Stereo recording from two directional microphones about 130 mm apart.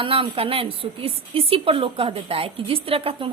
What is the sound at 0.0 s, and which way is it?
A woman's voice, 45° right (ahead or behind).